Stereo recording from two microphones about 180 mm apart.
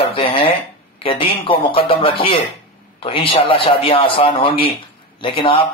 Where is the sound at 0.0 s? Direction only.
30° left (ahead or behind).